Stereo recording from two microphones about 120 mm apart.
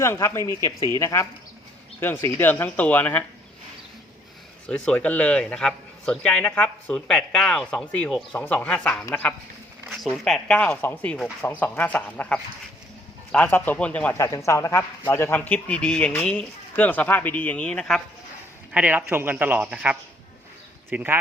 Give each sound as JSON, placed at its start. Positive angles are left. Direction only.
{"t": 0.0, "sound": "speech", "side_deg": 20}
{"t": 2.4, "sound": "speech", "side_deg": 15}
{"t": 4.7, "sound": "speech", "side_deg": 10}
{"t": 10.2, "sound": "speech", "side_deg": 5}
{"t": 14.2, "sound": "speech", "side_deg": 25}
{"t": 18.7, "sound": "a man's voice", "side_deg": -10}